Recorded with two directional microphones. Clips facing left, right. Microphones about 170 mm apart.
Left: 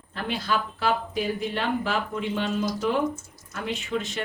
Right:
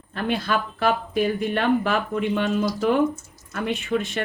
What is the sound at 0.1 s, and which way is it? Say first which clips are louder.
A woman's voice: right 4 dB; 55° right (ahead or behind).